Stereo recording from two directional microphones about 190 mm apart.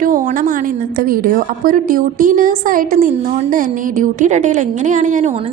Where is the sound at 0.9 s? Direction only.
50° right (ahead or behind).